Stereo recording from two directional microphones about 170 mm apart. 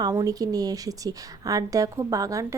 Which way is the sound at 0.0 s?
20° right (ahead or behind).